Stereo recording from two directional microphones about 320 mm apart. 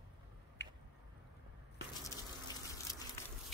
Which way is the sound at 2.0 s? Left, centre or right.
Centre.